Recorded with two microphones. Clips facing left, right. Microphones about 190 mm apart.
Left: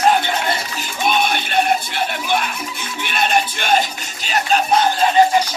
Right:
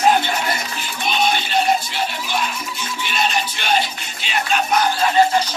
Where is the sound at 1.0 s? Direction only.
55° left (ahead or behind); by 4.8 s 35° left (ahead or behind).